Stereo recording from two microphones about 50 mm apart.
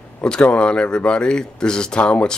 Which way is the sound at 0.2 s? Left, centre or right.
Centre.